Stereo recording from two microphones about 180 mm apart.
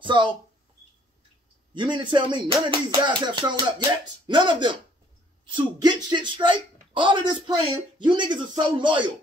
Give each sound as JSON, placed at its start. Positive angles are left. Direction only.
{"t": 0.0, "sound": "speech", "side_deg": -25}
{"t": 1.7, "sound": "speech", "side_deg": -25}
{"t": 5.8, "sound": "speech", "side_deg": -20}